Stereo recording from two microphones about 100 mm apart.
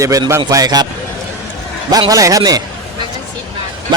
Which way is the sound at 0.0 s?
35° right (ahead or behind).